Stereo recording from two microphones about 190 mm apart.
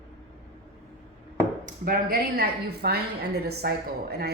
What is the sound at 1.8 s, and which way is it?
A woman's voice, 50° right (ahead or behind).